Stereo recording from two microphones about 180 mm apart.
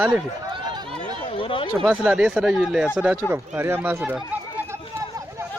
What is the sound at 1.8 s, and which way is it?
Speech, 5° right (ahead or behind).